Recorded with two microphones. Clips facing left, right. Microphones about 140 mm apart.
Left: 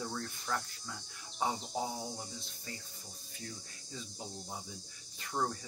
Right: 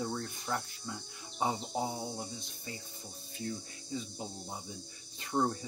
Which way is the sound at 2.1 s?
20° right (ahead or behind).